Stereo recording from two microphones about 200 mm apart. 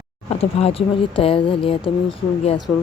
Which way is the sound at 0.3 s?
30° left (ahead or behind).